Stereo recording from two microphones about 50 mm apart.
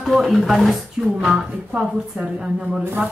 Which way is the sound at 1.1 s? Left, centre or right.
Centre.